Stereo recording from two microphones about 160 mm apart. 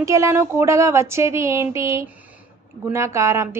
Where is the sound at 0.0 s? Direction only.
20° right (ahead or behind).